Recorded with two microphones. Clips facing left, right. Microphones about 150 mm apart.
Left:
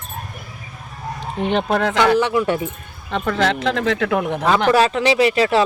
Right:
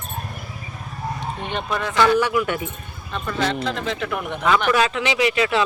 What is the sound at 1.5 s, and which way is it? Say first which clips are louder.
Speech: left 9 dB; 75° left (ahead or behind).